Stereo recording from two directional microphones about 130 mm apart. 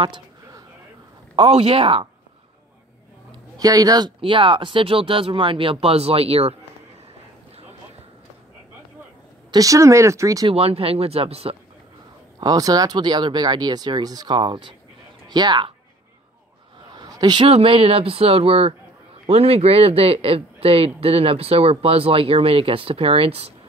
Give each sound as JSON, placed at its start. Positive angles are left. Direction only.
{"t": 1.3, "sound": "speech", "side_deg": -45}
{"t": 3.3, "sound": "speech", "side_deg": -30}
{"t": 9.5, "sound": "speech", "side_deg": -25}
{"t": 10.5, "sound": "speech", "side_deg": -50}
{"t": 12.4, "sound": "speech", "side_deg": -30}
{"t": 16.9, "sound": "a sound", "side_deg": -30}
{"t": 17.5, "sound": "speech", "side_deg": -50}